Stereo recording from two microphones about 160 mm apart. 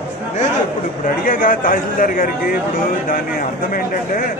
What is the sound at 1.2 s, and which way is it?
A man's voice, 60° left (ahead or behind).